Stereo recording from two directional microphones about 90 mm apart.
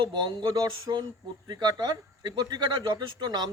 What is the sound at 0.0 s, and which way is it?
Speech, 55° right (ahead or behind).